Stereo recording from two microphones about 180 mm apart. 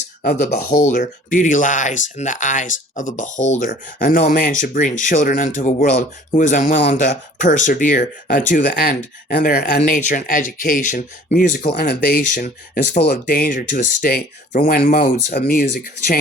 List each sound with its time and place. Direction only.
0.2 s speech: 50° left (ahead or behind)